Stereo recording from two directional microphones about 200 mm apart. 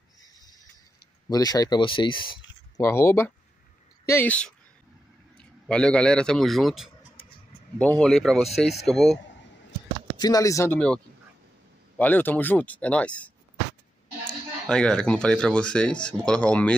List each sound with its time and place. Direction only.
0.2 s a sound: 20° left (ahead or behind)
1.3 s speech: 20° left (ahead or behind)
2.9 s a man's voice: 15° left (ahead or behind)
10.1 s speech: 20° left (ahead or behind)
12.0 s speech: 10° left (ahead or behind)